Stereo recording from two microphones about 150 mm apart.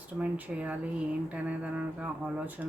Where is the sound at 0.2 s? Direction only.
10° right (ahead or behind).